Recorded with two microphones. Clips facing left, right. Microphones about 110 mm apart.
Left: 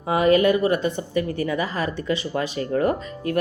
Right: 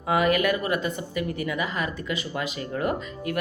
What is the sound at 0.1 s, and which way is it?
A woman's voice, 30° left (ahead or behind).